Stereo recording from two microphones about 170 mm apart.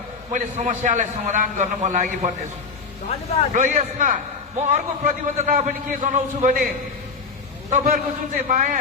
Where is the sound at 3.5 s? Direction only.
50° right (ahead or behind).